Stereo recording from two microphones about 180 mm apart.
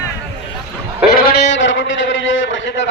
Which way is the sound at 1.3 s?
70° left (ahead or behind).